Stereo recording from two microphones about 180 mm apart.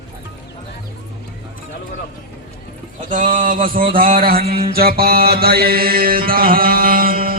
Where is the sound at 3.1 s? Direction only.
45° right (ahead or behind).